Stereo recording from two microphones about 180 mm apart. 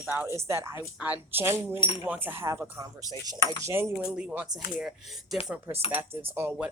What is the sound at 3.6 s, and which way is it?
Speech, 15° right (ahead or behind).